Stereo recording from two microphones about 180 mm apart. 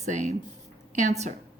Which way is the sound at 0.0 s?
40° right (ahead or behind).